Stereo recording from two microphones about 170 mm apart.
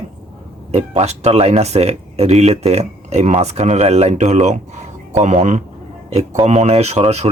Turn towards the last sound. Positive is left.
turn(degrees=-40)  # may be behind; listen again after turning